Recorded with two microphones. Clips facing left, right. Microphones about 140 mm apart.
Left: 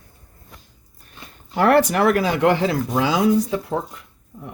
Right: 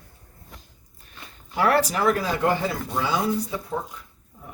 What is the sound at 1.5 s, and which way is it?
Speech, 55° left (ahead or behind).